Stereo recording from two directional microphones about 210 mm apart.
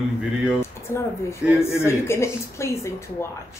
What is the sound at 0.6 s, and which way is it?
Speech, 10° left (ahead or behind).